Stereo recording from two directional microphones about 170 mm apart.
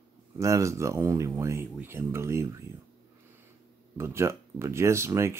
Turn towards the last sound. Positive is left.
turn(degrees=-15)  # may be behind; listen again after turning